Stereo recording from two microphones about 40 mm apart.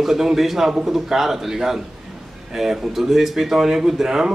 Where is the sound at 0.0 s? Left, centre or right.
Centre.